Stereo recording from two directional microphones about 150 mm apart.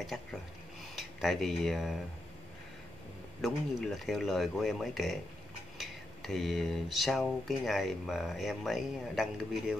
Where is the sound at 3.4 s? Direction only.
Centre (ahead or behind).